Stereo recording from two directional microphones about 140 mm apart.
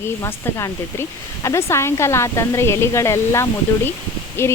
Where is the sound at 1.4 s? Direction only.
20° left (ahead or behind).